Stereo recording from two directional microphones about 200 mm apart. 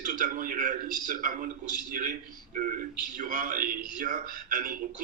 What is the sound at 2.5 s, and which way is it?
Speech, 40° right (ahead or behind).